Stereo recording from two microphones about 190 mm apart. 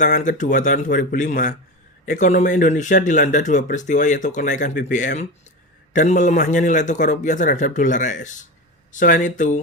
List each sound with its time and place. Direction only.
0.0 s speech: 40° left (ahead or behind)